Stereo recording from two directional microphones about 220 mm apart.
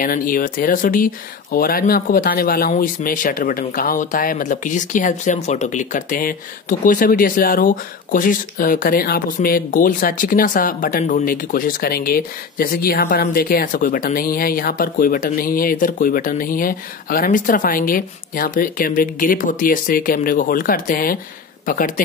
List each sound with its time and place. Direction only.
0.0 s speech: 40° left (ahead or behind)